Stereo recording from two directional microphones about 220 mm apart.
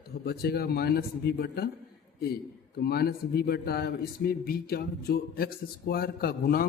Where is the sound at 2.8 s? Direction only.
45° left (ahead or behind).